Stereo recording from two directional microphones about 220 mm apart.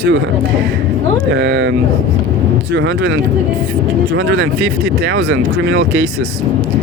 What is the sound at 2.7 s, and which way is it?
Speech, 50° right (ahead or behind).